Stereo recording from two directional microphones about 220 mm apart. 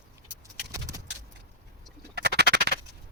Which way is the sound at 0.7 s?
15° right (ahead or behind).